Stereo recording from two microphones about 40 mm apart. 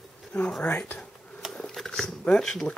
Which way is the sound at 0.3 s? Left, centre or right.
Left.